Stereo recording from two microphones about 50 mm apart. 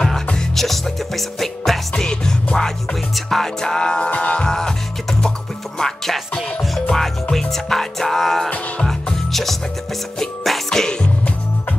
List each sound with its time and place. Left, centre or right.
0.6 s music: centre; by 4.4 s left
4.4 s music: centre
5.8 s speech: centre
6.9 s music: centre